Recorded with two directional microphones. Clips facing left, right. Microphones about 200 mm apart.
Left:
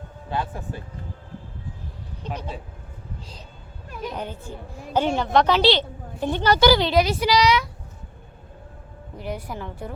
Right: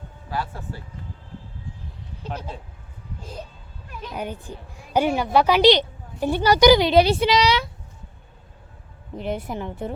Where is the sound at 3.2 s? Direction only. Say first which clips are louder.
Right 7 dB; 50° right (ahead or behind).